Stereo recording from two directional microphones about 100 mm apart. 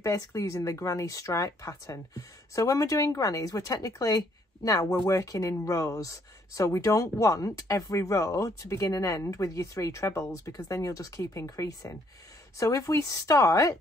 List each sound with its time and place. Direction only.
0.0 s speech: 35° left (ahead or behind)